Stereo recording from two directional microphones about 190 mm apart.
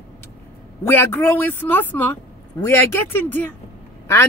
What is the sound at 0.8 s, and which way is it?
Speech, 10° left (ahead or behind).